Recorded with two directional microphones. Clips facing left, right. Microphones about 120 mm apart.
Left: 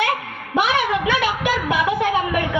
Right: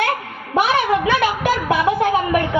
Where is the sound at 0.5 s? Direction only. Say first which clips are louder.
Right 3 dB; 35° right (ahead or behind).